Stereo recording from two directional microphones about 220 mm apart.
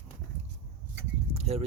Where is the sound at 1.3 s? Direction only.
30° right (ahead or behind).